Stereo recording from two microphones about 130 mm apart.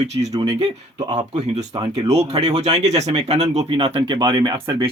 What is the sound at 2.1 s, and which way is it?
Speech, 55° right (ahead or behind).